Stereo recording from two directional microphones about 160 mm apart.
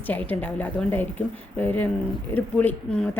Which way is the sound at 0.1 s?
10° left (ahead or behind).